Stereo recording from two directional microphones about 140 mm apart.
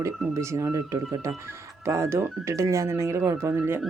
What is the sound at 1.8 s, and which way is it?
Speech, 20° right (ahead or behind).